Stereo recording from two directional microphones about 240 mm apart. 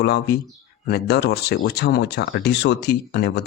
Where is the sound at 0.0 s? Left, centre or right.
Left.